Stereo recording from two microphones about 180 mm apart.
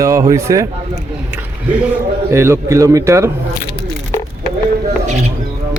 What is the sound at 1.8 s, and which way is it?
A man's voice, 10° right (ahead or behind).